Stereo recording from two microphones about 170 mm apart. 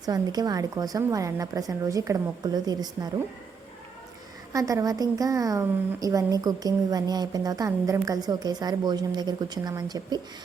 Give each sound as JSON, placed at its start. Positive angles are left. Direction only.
{"t": 0.0, "sound": "a woman's voice", "side_deg": -20}
{"t": 4.5, "sound": "a woman's voice", "side_deg": -20}